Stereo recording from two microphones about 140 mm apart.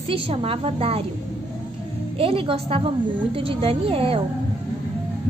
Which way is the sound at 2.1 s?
45° right (ahead or behind).